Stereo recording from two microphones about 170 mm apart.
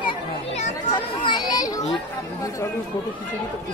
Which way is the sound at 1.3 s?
25° left (ahead or behind).